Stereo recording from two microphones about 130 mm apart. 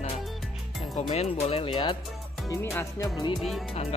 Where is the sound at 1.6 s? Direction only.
40° left (ahead or behind).